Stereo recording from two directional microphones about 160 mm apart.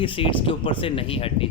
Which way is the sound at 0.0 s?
35° left (ahead or behind).